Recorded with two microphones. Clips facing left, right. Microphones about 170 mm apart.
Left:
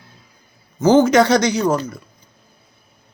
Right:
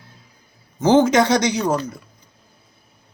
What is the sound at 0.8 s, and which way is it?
Speech, 25° right (ahead or behind).